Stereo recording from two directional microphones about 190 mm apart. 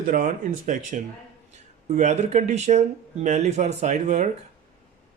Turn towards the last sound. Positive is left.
turn(degrees=-40)  # may be behind; listen again after turning